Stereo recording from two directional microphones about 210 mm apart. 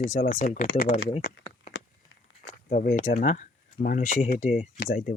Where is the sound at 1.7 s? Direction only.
65° left (ahead or behind).